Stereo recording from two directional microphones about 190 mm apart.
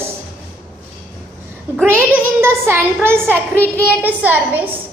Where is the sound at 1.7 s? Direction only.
10° right (ahead or behind).